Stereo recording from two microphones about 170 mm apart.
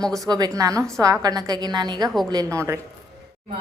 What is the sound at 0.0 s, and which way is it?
Speech, 5° left (ahead or behind).